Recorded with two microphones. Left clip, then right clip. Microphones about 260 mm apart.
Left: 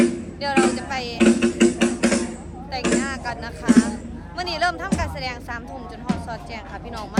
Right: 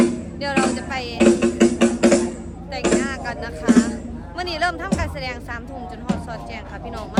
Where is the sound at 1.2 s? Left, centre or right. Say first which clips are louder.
Right 2 dB; right.